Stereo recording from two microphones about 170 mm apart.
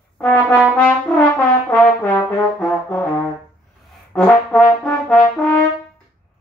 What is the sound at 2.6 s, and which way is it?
Brass instrument, 10° left (ahead or behind).